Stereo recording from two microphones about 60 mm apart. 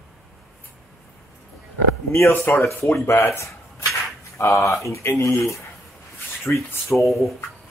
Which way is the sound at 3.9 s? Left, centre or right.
Left.